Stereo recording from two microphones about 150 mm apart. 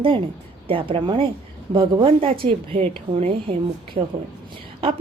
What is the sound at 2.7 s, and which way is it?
A woman's voice, 45° right (ahead or behind).